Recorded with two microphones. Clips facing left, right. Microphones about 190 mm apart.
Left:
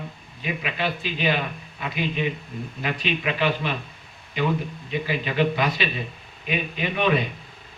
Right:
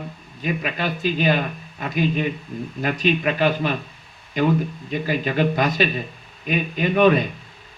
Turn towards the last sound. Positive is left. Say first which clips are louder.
# right 6 dB
turn(degrees=-45)  # may be behind; listen again after turning